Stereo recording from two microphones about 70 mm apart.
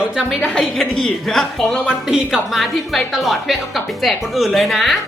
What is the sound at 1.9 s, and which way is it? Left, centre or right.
Speech, centre.